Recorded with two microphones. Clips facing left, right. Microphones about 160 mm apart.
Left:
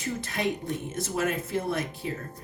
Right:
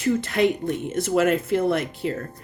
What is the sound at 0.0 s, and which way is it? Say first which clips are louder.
A woman's voice: right 9 dB; 70° right (ahead or behind).